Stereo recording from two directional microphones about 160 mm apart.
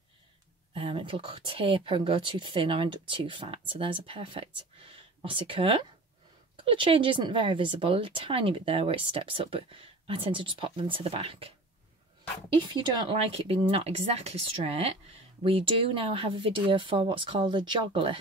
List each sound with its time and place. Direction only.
0.7 s speech: 35° right (ahead or behind)
12.5 s speech: 30° right (ahead or behind)